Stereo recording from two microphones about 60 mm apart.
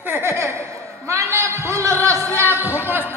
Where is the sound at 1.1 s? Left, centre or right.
Right.